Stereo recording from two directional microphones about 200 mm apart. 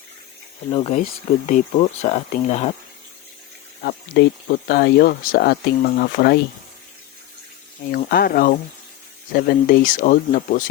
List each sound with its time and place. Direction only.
1.5 s speech: 35° left (ahead or behind)
3.8 s speech: 50° left (ahead or behind)
7.9 s speech: 50° left (ahead or behind)